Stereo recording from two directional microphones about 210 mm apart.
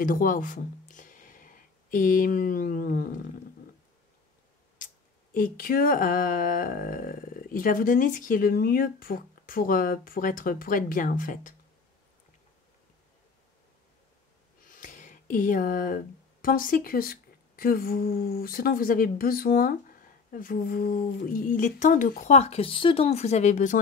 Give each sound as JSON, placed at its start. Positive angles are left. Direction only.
{"t": 0.0, "sound": "speech", "side_deg": 40}
{"t": 4.7, "sound": "speech", "side_deg": 40}
{"t": 14.7, "sound": "speech", "side_deg": 40}